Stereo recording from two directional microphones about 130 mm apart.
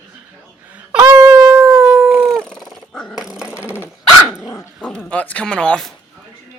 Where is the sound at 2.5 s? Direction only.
Centre (ahead or behind).